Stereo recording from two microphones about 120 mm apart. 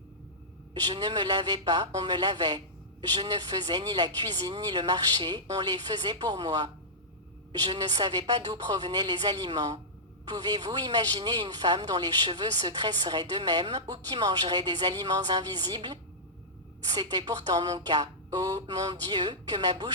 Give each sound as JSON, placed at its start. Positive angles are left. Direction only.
{"t": 0.7, "sound": "speech", "side_deg": -35}